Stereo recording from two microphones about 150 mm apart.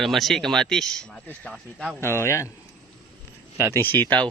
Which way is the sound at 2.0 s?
15° left (ahead or behind).